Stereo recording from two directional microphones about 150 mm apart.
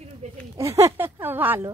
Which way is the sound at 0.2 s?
45° right (ahead or behind).